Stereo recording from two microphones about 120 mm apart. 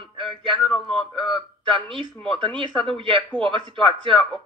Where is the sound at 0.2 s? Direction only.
45° right (ahead or behind).